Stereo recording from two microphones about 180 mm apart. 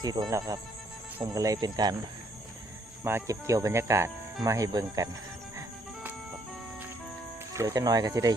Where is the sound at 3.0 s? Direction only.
15° right (ahead or behind).